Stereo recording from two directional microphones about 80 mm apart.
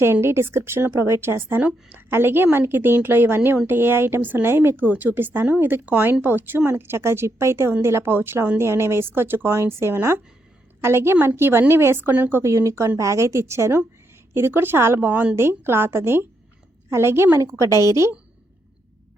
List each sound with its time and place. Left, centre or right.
0.0 s speech: right
12.4 s speech: right
15.1 s a woman's voice: centre
15.4 s speech: right